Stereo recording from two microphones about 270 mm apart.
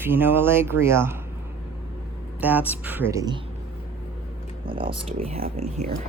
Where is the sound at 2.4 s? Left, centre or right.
Centre.